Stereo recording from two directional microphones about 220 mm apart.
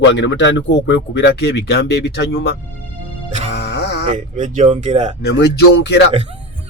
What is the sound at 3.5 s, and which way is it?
Music, 50° left (ahead or behind).